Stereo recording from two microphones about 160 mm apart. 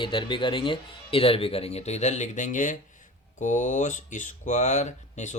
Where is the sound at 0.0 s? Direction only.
30° left (ahead or behind).